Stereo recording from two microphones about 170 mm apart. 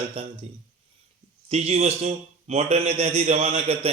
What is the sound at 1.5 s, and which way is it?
A man's voice, 40° right (ahead or behind).